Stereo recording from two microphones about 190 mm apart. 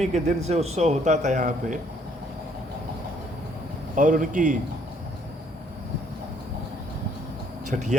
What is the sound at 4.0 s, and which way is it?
Speech, 45° right (ahead or behind).